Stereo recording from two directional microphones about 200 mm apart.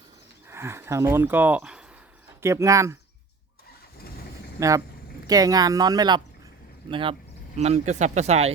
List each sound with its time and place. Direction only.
0.5 s speech: 15° right (ahead or behind)
4.6 s speech: 15° right (ahead or behind); by 8.4 s 35° right (ahead or behind)